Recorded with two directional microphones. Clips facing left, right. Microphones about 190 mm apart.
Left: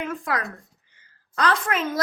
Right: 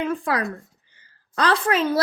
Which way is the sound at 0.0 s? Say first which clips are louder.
Right 4 dB; 30° right (ahead or behind).